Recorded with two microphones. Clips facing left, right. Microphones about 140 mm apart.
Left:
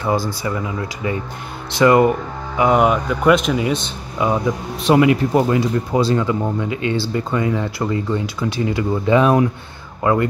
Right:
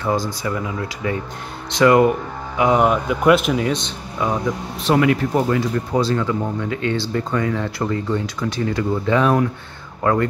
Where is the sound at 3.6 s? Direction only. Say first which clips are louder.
Left 1 dB; 5° left (ahead or behind).